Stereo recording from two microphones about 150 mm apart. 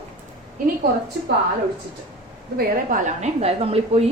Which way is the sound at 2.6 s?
60° right (ahead or behind).